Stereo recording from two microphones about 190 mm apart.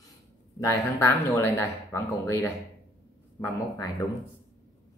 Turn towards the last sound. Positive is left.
turn(degrees=20)  # may be behind; listen again after turning